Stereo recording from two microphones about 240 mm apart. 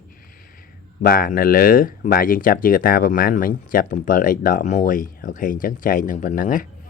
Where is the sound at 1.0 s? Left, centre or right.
Left.